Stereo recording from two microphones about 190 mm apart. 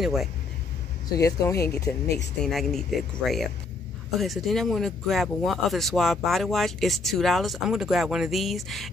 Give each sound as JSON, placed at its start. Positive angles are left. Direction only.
{"t": 0.0, "sound": "speech", "side_deg": 0}
{"t": 1.2, "sound": "speech", "side_deg": 15}
{"t": 2.1, "sound": "speech", "side_deg": 0}